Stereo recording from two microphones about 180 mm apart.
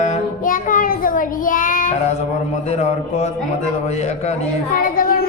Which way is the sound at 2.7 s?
40° left (ahead or behind).